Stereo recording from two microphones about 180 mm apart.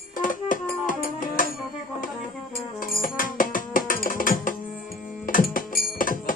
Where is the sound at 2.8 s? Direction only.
50° left (ahead or behind).